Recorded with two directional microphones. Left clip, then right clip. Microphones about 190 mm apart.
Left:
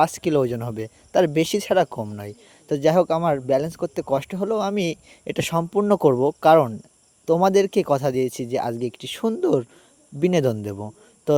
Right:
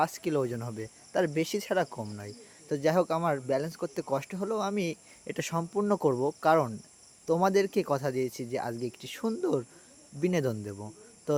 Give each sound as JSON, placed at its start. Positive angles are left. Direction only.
{"t": 0.0, "sound": "speech", "side_deg": 45}